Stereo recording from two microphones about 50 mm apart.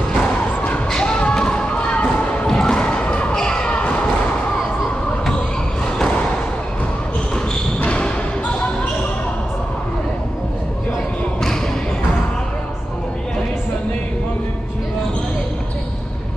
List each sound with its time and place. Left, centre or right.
0.8 s basketball bounce: centre
2.4 s thump: centre
3.5 s basketball bounce: left
7.8 s basketball bounce: left